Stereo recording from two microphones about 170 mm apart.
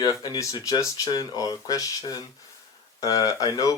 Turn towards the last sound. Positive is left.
turn(degrees=20)  # may be behind; listen again after turning